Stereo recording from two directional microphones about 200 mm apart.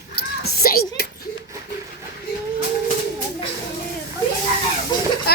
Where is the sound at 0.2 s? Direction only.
50° left (ahead or behind).